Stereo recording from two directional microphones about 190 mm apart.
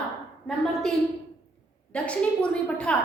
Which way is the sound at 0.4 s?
Centre (ahead or behind).